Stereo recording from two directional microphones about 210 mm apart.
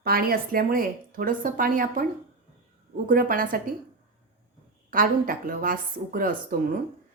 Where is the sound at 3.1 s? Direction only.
40° right (ahead or behind).